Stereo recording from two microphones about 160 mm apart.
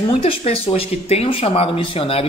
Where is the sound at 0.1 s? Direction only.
35° left (ahead or behind).